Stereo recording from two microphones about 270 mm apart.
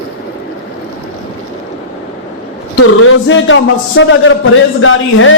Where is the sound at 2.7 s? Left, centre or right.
Left.